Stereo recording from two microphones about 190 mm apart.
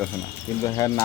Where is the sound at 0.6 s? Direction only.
15° left (ahead or behind).